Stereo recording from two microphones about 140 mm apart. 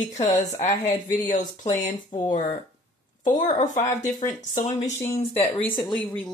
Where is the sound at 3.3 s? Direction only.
65° left (ahead or behind).